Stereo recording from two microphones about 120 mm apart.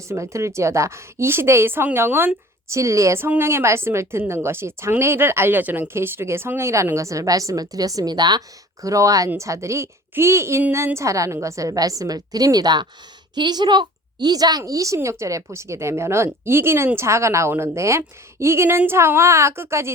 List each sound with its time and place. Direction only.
0.1 s a woman's voice: 25° right (ahead or behind)